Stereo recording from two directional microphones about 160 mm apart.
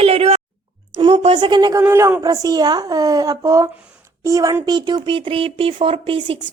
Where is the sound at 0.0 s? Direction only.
40° right (ahead or behind).